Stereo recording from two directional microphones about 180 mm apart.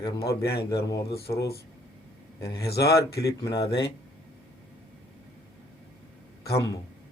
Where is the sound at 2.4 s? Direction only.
20° left (ahead or behind).